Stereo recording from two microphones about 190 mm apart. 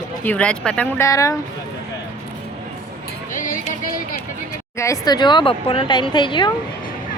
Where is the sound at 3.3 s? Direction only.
45° left (ahead or behind).